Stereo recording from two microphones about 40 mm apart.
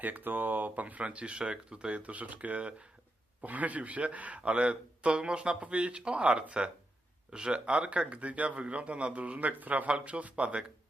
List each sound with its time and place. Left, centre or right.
0.0 s speech: right